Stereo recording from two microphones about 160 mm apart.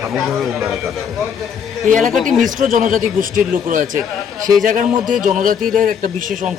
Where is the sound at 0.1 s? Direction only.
Centre (ahead or behind).